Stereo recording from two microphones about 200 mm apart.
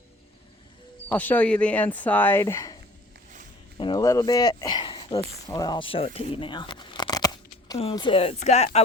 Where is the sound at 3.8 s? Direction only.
20° left (ahead or behind).